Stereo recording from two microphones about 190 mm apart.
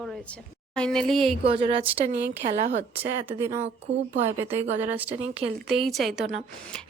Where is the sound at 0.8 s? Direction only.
5° left (ahead or behind).